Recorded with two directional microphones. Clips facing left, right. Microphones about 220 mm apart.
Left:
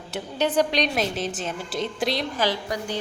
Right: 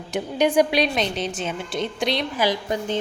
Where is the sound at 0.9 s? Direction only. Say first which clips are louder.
Right 1 dB; 5° left (ahead or behind).